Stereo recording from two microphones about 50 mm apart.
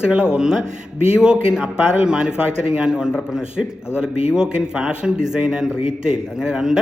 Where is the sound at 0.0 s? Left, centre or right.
Centre.